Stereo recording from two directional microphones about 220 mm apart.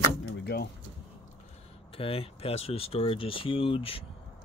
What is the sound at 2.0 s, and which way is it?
Speech, 25° left (ahead or behind).